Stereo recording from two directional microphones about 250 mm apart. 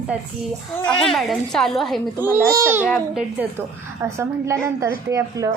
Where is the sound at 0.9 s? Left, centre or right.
Centre.